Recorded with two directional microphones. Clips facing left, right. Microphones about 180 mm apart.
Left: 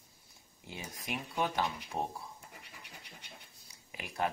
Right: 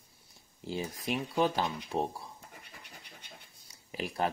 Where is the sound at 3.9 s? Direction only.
30° right (ahead or behind).